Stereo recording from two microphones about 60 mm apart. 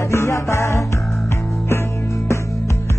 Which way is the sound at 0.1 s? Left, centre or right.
Left.